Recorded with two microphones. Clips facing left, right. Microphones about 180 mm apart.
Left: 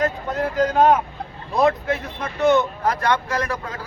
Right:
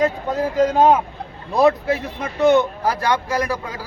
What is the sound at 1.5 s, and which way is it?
A man's voice, 10° right (ahead or behind).